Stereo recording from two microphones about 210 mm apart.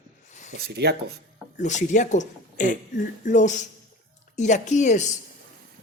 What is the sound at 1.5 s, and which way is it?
Speech, 35° left (ahead or behind).